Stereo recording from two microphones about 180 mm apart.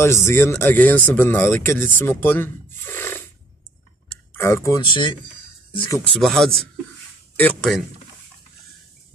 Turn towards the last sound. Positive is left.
turn(degrees=5)  # may be behind; listen again after turning